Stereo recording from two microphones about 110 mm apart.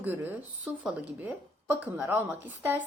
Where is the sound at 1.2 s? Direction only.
15° right (ahead or behind).